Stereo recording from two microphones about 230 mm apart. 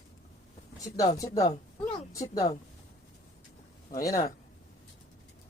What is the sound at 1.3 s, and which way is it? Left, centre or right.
Speech, left.